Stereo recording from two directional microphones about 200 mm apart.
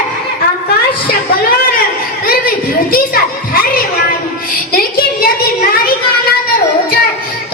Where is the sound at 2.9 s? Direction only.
45° left (ahead or behind).